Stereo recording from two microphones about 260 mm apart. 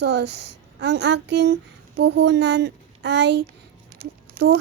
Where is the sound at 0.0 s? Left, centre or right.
Right.